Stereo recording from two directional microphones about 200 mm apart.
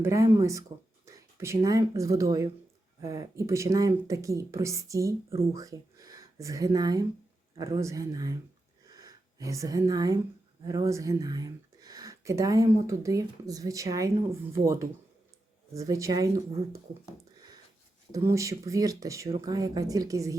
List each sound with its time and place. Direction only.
0.0 s speech: 15° right (ahead or behind)
8.9 s a sound: 20° right (ahead or behind)
10.7 s speech: 15° right (ahead or behind)
18.1 s speech: 15° right (ahead or behind)